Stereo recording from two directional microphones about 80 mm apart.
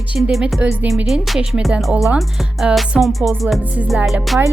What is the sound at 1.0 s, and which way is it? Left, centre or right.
Music, centre.